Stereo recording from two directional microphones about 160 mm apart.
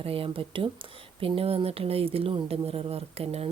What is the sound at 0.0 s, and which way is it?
Speech, 35° right (ahead or behind).